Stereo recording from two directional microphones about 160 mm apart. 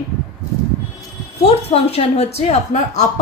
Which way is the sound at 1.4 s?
40° left (ahead or behind).